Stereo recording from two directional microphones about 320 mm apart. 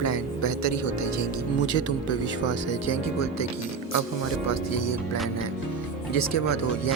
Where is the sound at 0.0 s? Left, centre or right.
Left.